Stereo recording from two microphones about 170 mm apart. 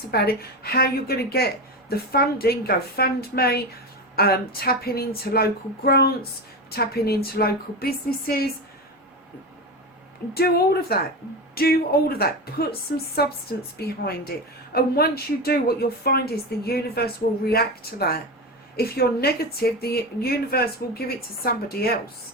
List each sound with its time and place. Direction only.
0.1 s a woman's voice: 65° left (ahead or behind)
10.3 s a woman's voice: 65° left (ahead or behind)